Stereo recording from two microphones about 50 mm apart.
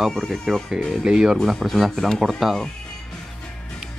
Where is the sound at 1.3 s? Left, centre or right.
Centre.